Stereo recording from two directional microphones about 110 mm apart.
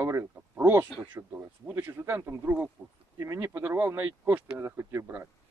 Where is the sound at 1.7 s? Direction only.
20° right (ahead or behind).